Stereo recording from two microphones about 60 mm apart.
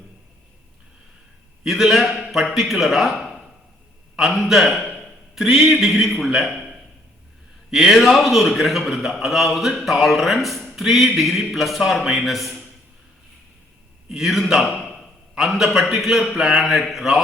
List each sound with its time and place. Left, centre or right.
1.6 s a man's voice: centre
5.0 s a sound: centre
5.8 s a man's voice: centre
14.1 s a man's voice: centre